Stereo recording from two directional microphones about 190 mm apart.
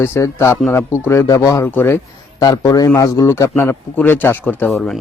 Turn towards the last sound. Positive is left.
turn(degrees=0)  # may be behind; listen again after turning